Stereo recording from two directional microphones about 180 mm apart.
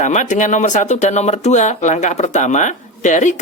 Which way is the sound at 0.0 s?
40° left (ahead or behind).